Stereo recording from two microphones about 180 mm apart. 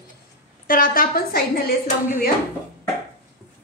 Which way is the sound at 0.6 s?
50° left (ahead or behind).